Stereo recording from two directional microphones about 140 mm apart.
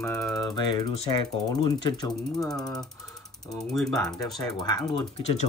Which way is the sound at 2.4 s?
5° left (ahead or behind).